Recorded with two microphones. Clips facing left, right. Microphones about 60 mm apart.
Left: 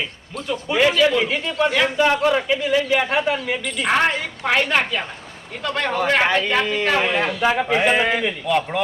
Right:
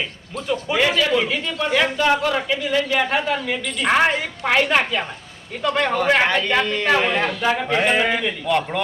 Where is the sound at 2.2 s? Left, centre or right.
Centre.